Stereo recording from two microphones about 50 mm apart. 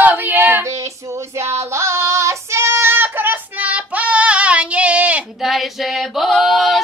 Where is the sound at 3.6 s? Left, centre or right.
Right.